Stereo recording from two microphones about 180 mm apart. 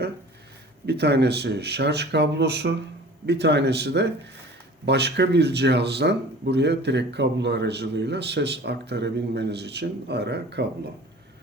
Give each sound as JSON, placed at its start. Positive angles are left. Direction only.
{"t": 0.9, "sound": "speech", "side_deg": -65}